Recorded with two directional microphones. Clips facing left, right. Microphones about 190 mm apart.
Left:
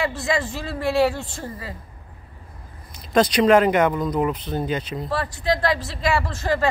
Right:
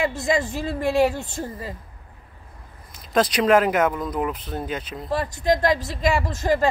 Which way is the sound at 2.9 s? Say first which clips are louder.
Left 2 dB; centre (ahead or behind).